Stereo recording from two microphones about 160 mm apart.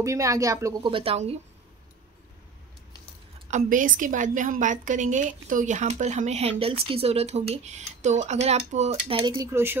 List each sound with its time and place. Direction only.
0.0 s a woman's voice: 20° right (ahead or behind)
0.8 s speech: 35° right (ahead or behind)
3.4 s a woman's voice: 50° right (ahead or behind)
9.2 s a woman's voice: 30° right (ahead or behind)
9.5 s speech: 15° right (ahead or behind)